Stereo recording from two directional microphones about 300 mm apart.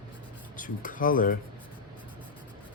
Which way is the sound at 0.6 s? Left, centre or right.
Left.